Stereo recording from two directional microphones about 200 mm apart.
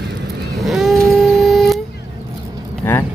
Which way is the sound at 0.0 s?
55° right (ahead or behind).